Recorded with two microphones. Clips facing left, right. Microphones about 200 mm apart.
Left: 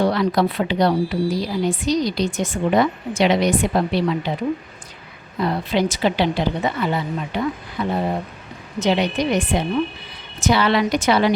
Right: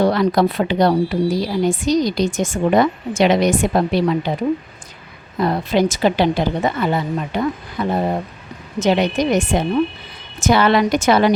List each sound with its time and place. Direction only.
0.0 s speech: 45° right (ahead or behind)
5.4 s speech: 45° right (ahead or behind)